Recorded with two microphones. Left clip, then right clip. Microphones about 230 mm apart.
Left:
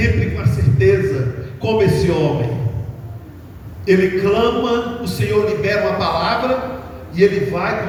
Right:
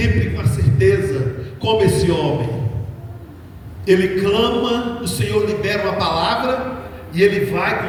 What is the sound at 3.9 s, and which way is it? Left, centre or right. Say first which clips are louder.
Speech: left 1 dB; right.